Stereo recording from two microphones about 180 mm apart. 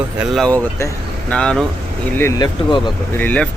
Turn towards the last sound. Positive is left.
turn(degrees=10)  # may be behind; listen again after turning